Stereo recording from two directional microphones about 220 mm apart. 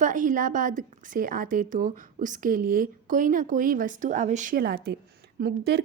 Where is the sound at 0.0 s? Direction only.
35° right (ahead or behind).